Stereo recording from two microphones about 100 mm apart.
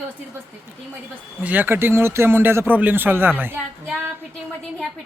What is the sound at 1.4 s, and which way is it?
Speech, 20° right (ahead or behind).